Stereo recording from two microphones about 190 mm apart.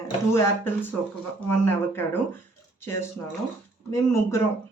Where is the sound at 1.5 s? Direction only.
10° left (ahead or behind).